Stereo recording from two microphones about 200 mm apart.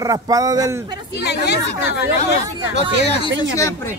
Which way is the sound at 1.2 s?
55° left (ahead or behind).